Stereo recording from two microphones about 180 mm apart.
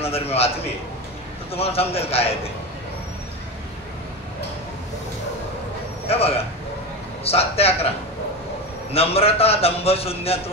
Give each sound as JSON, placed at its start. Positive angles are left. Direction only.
{"t": 0.0, "sound": "a man's voice", "side_deg": 35}
{"t": 1.5, "sound": "a man's voice", "side_deg": 35}
{"t": 6.0, "sound": "a man's voice", "side_deg": 35}
{"t": 8.9, "sound": "a man's voice", "side_deg": 35}